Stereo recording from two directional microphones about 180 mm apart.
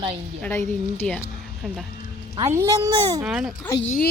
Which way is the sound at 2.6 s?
20° right (ahead or behind).